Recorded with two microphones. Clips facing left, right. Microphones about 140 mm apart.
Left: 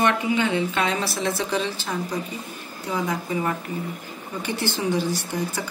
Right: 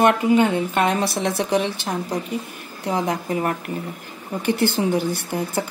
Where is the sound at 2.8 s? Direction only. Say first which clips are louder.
Right 4 dB; 65° right (ahead or behind).